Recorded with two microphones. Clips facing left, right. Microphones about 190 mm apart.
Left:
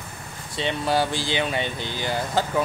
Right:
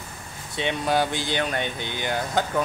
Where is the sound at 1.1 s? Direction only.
50° right (ahead or behind).